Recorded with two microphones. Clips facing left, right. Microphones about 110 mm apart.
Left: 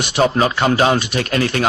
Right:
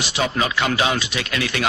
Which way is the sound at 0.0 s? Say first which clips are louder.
Left 7 dB; 55° left (ahead or behind).